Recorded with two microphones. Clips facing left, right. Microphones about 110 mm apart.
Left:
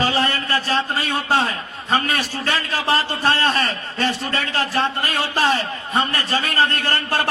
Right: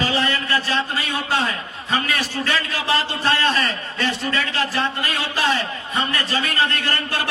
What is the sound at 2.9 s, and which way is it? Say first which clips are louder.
A man's voice: right 1 dB; 45° left (ahead or behind).